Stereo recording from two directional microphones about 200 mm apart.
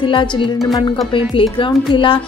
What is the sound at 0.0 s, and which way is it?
A woman's voice, 25° left (ahead or behind).